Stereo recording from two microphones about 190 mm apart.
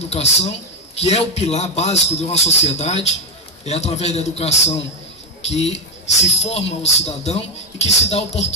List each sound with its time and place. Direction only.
0.1 s a man's voice: 35° left (ahead or behind)